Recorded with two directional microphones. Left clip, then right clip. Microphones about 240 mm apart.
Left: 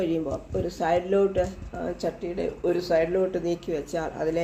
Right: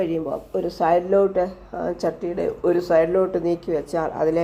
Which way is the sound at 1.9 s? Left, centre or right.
Centre.